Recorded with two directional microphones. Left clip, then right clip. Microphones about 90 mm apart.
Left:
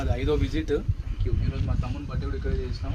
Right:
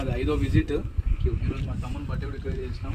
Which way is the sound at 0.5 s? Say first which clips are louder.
Even; 25° left (ahead or behind).